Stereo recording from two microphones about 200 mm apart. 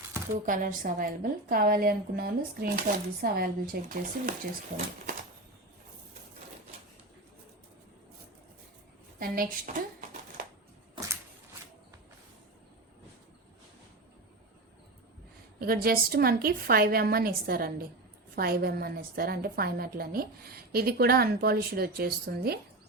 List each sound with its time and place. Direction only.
0.4 s a woman's voice: 40° right (ahead or behind)
9.1 s a woman's voice: 45° right (ahead or behind)
15.5 s a woman's voice: 50° right (ahead or behind)